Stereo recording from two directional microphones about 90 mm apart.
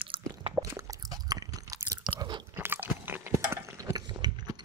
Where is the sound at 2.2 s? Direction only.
60° right (ahead or behind).